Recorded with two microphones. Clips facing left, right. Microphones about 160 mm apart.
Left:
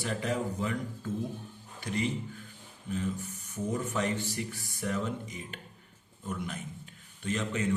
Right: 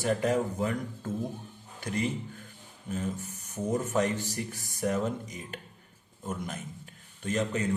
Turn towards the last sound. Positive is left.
turn(degrees=-40)  # may be behind; listen again after turning